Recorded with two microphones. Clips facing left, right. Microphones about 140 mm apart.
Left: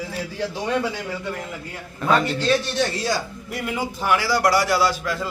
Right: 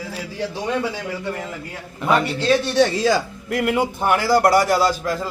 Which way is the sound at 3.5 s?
70° right (ahead or behind).